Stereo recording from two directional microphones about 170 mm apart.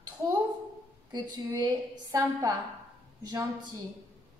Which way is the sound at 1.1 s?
25° right (ahead or behind).